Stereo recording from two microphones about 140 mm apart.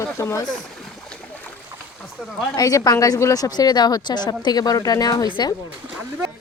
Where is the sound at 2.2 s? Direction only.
5° right (ahead or behind).